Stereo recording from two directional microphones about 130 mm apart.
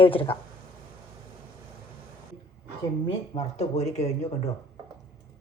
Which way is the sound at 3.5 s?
55° left (ahead or behind).